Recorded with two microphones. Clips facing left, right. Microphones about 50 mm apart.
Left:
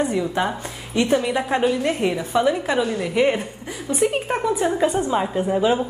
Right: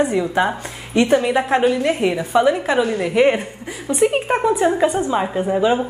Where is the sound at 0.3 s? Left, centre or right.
Centre.